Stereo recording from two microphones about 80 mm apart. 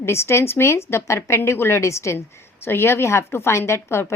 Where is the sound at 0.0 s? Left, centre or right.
Left.